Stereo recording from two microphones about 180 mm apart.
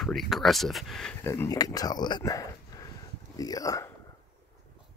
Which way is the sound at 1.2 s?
15° left (ahead or behind).